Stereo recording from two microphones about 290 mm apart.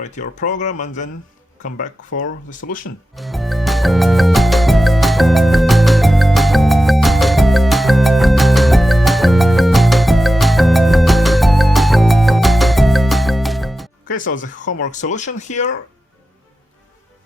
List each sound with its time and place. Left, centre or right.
0.0 s speech: left
2.0 s speech: left
2.6 s speech: left
3.2 s music: centre
14.1 s speech: left